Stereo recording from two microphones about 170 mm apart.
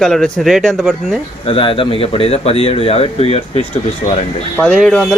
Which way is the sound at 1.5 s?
30° left (ahead or behind).